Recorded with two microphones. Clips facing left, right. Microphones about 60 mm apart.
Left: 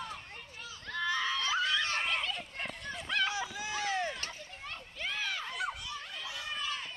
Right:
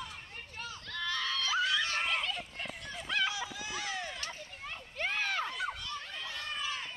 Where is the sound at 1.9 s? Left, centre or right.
Centre.